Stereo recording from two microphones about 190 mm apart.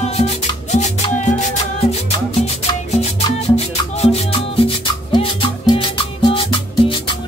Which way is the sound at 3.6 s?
35° left (ahead or behind).